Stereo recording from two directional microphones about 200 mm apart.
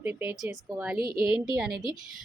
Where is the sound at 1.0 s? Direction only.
50° right (ahead or behind).